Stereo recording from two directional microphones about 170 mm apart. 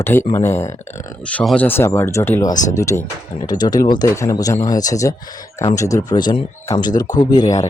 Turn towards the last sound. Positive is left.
turn(degrees=20)  # may be behind; listen again after turning